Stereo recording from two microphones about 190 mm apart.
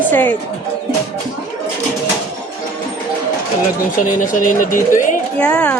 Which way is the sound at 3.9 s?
45° left (ahead or behind).